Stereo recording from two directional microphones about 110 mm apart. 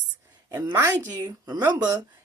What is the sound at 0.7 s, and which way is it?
Speech, 20° right (ahead or behind).